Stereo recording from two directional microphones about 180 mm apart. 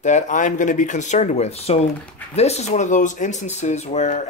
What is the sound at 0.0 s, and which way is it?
Speech, 40° left (ahead or behind).